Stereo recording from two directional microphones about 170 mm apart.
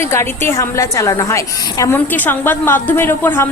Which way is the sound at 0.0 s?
15° left (ahead or behind).